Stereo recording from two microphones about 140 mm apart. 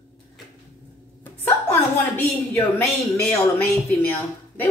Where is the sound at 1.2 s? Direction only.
15° left (ahead or behind).